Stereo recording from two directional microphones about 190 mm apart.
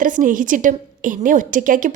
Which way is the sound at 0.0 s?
45° right (ahead or behind).